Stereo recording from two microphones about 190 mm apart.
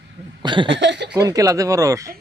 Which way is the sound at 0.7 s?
70° right (ahead or behind).